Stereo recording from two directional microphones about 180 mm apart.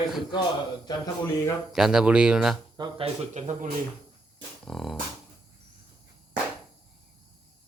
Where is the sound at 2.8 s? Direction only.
30° right (ahead or behind).